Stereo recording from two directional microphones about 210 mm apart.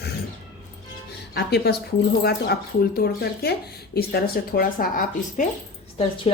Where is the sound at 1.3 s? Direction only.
50° left (ahead or behind).